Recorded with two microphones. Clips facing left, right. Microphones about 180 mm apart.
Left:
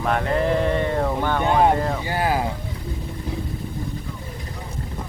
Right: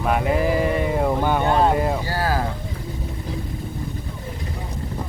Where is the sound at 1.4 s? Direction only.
15° left (ahead or behind).